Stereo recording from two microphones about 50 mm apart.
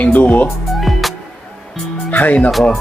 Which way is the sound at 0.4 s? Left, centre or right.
Centre.